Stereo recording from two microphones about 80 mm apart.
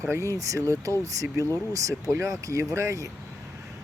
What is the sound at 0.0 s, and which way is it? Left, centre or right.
Speech, right.